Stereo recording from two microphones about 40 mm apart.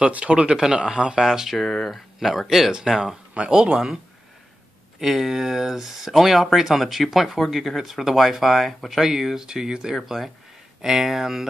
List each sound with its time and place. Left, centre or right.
0.0 s speech: right; by 1.6 s centre
1.6 s speech: centre
1.9 s speech: centre
2.7 s speech: centre
5.0 s speech: centre